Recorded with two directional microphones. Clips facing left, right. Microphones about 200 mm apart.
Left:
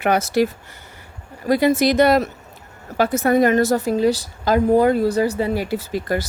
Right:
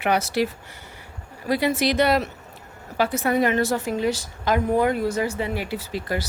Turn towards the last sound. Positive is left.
turn(degrees=45)  # may be behind; listen again after turning